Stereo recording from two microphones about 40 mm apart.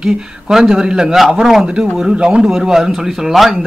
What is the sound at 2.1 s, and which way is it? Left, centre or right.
Speech, right.